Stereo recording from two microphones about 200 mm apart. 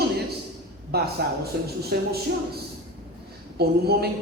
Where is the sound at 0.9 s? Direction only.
50° right (ahead or behind).